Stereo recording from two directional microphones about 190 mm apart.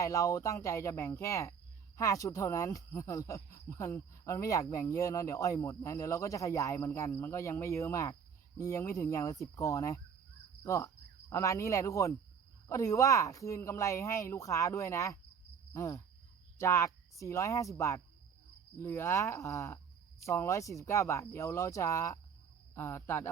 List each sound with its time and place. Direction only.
0.0 s speech: 15° left (ahead or behind)
10.6 s cricket: 15° left (ahead or behind)
12.6 s speech: 15° left (ahead or behind)